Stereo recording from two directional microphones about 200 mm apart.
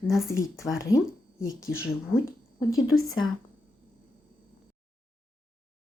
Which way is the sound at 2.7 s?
90° left.